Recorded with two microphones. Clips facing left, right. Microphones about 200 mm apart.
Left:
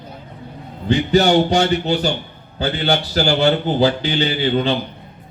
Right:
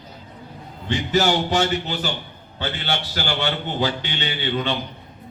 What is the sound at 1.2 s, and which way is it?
A man's voice, 35° left (ahead or behind).